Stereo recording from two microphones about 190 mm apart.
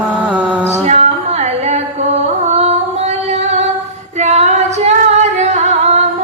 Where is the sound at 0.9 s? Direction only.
35° right (ahead or behind).